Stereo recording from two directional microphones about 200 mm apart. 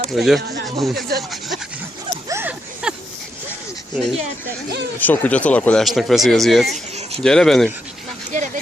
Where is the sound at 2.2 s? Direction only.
10° right (ahead or behind).